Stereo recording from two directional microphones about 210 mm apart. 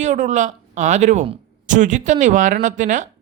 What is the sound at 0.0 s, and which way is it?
A man's voice, 35° right (ahead or behind).